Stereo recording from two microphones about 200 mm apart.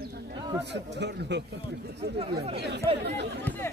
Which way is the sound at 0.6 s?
60° right (ahead or behind).